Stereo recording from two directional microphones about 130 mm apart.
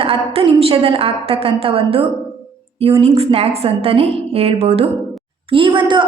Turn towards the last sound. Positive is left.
turn(degrees=-40)  # may be behind; listen again after turning